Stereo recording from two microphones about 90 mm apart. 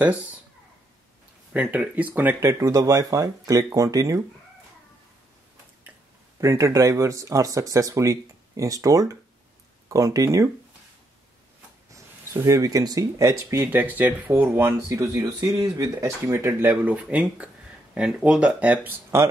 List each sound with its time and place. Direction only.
0.0 s speech: 15° right (ahead or behind)
1.5 s speech: 15° right (ahead or behind); by 4.2 s 40° right (ahead or behind)
6.4 s speech: 35° right (ahead or behind)
11.9 s speech: 35° right (ahead or behind)
13.7 s speech: 20° right (ahead or behind)
14.9 s speech: 45° right (ahead or behind); by 19.1 s 20° right (ahead or behind)